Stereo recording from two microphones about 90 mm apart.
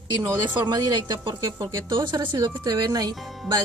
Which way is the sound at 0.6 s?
55° right (ahead or behind).